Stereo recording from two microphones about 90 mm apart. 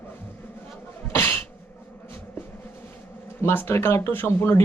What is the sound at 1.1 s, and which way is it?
Sneeze, 30° left (ahead or behind).